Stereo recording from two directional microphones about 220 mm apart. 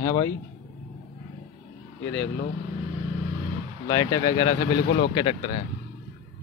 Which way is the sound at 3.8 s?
20° left (ahead or behind).